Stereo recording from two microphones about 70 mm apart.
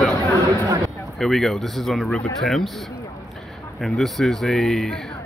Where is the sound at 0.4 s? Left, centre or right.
Right.